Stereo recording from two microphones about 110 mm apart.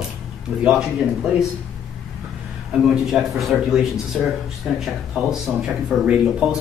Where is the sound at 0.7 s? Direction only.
5° right (ahead or behind).